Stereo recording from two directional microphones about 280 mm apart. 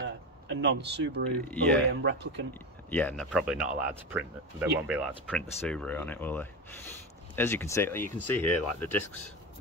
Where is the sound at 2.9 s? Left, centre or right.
Centre.